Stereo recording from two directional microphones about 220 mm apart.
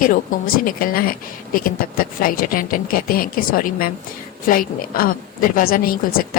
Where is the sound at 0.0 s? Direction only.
40° left (ahead or behind).